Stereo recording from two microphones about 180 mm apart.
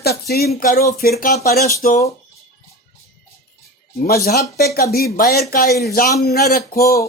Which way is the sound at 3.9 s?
60° left (ahead or behind).